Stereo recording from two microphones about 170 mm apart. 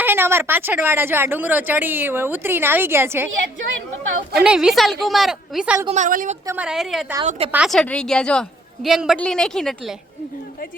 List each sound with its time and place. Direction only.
0.0 s speech: 15° right (ahead or behind)
4.4 s a woman's voice: 5° right (ahead or behind)
5.9 s a woman's voice: 50° right (ahead or behind)
6.5 s a woman's voice: 5° right (ahead or behind)
7.3 s speech: 35° right (ahead or behind)
7.5 s a woman's voice: centre (ahead or behind)